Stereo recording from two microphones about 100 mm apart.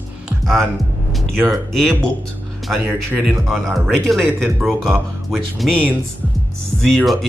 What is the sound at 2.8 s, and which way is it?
Speech, 20° right (ahead or behind).